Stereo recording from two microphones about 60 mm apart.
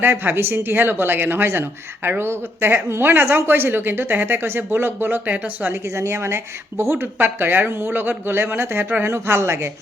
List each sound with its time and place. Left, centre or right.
0.0 s a woman's voice: right
6.0 s speech: right
7.2 s a woman's voice: right